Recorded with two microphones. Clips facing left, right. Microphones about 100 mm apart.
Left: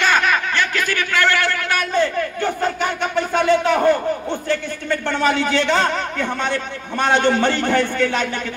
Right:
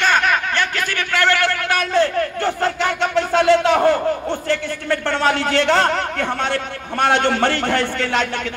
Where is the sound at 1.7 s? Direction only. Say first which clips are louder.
Right 2 dB; 70° right (ahead or behind).